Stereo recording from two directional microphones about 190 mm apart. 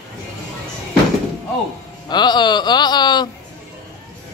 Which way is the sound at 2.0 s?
20° left (ahead or behind).